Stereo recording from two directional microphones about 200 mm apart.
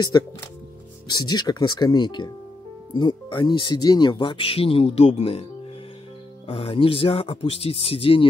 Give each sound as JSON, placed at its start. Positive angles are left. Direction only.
{"t": 0.1, "sound": "speech", "side_deg": 20}